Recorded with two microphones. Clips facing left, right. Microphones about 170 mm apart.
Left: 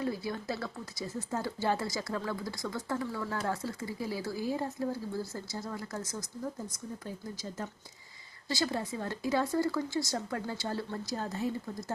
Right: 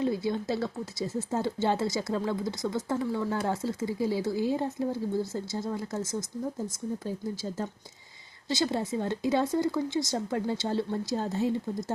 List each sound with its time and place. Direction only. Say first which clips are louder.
0.0 s speech: right 6 dB; 25° right (ahead or behind)
8.4 s speech: right 4 dB; 25° right (ahead or behind)